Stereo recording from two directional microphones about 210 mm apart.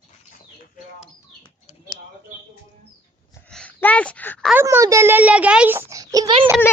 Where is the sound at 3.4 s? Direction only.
5° left (ahead or behind).